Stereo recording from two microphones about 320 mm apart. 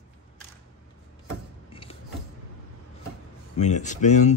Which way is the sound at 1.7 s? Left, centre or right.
Centre.